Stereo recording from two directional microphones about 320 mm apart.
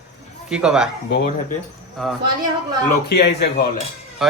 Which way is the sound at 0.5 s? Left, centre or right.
Centre.